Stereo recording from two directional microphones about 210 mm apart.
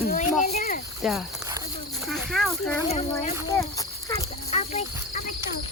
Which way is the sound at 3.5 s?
15° left (ahead or behind).